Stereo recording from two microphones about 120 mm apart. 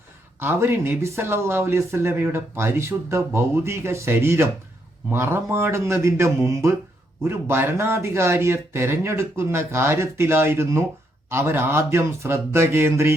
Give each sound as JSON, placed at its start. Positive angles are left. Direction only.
{"t": 0.3, "sound": "speech", "side_deg": -20}